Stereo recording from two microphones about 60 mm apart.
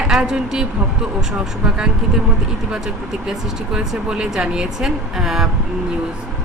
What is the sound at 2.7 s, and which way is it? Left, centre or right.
Speech, centre.